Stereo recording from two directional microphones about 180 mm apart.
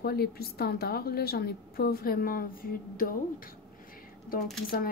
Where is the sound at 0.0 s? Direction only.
60° left (ahead or behind).